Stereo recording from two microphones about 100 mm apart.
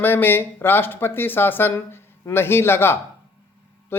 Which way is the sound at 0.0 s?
20° left (ahead or behind).